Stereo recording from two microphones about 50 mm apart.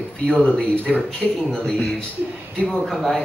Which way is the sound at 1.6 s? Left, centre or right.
Left.